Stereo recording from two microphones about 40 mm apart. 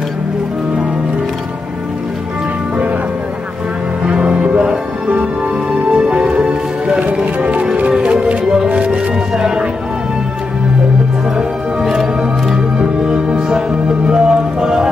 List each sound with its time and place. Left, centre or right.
4.0 s music: right
5.9 s music: right
7.3 s music: right
11.3 s music: centre
13.1 s music: centre